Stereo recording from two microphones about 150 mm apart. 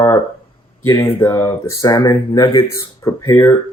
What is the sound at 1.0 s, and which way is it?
Speech, 20° left (ahead or behind).